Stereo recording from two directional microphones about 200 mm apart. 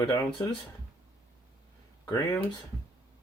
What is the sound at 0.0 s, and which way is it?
Speech, 20° left (ahead or behind).